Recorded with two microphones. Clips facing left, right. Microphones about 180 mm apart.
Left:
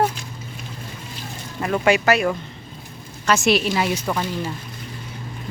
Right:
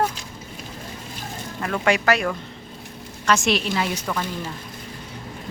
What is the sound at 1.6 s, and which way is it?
Speech, 10° left (ahead or behind).